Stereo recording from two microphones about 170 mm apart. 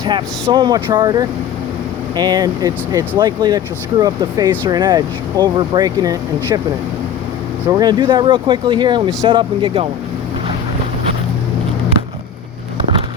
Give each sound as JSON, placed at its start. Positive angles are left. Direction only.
{"t": 0.0, "sound": "speech", "side_deg": -25}
{"t": 7.7, "sound": "speech", "side_deg": -25}